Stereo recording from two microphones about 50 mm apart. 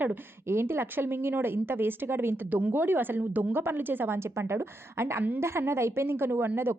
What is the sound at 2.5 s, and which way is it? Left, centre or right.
Speech, right.